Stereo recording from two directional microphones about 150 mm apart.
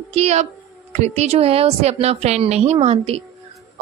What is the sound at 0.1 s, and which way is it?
A woman's voice, 45° right (ahead or behind).